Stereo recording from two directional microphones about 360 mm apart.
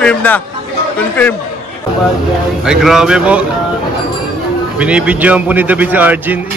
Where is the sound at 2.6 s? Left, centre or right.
Centre.